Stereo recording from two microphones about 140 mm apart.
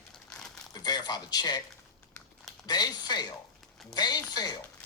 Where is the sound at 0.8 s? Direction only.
30° left (ahead or behind).